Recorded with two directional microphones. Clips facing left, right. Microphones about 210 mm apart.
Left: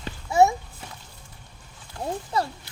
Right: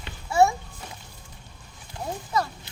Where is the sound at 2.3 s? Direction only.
30° left (ahead or behind).